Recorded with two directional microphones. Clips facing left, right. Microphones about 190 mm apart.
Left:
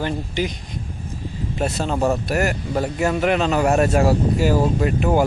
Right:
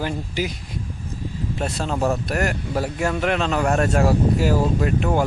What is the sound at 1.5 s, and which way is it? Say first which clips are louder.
Speech: left 3 dB; centre (ahead or behind).